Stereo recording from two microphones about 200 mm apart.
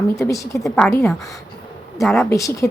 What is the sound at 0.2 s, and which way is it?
A woman's voice, 15° left (ahead or behind).